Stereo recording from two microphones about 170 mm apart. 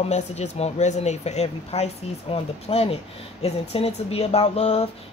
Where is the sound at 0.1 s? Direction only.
40° left (ahead or behind).